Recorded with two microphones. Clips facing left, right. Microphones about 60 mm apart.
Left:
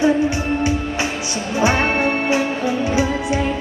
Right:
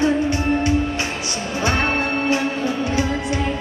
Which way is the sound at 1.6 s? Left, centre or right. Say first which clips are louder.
Left 4 dB; left.